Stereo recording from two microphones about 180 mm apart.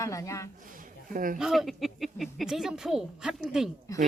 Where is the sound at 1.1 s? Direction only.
50° right (ahead or behind).